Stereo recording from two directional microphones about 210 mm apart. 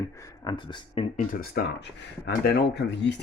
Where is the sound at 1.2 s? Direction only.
40° left (ahead or behind).